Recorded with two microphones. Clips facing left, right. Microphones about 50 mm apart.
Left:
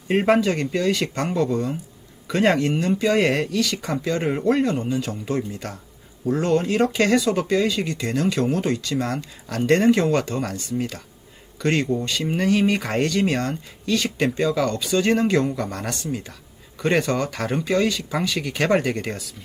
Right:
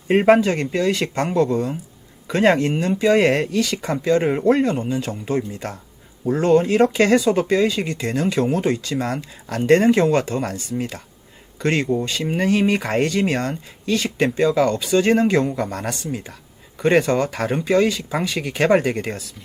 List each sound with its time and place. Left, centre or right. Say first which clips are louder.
0.1 s speech: right 4 dB; centre
1.0 s speech: right 3 dB; right
1.3 s speech: right 4 dB; centre
2.7 s speech: right 3 dB; centre
4.7 s speech: right 1 dB; right
5.4 s speech: right 2 dB; centre